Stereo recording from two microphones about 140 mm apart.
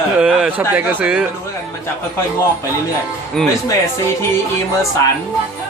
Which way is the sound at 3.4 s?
5° left (ahead or behind).